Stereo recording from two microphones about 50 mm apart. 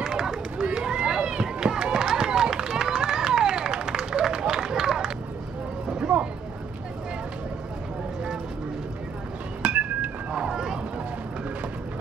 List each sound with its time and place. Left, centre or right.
0.0 s run: centre
5.9 s a sound: centre
9.6 s cat: right
10.4 s vehicle: centre